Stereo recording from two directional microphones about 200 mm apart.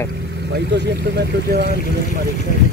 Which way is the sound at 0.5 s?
55° right (ahead or behind).